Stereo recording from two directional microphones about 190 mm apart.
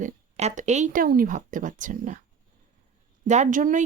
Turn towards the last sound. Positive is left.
turn(degrees=-45)  # may be behind; listen again after turning